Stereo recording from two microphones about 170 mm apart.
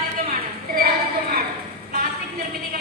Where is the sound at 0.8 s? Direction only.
65° right (ahead or behind).